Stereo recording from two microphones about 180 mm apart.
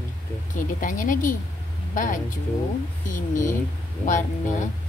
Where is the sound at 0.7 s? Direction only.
50° left (ahead or behind).